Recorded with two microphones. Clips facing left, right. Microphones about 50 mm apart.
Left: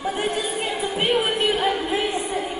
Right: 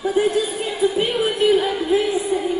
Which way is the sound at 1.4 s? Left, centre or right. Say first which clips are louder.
Right 4 dB; centre.